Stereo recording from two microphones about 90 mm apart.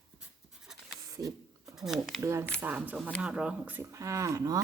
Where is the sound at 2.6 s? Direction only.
20° right (ahead or behind).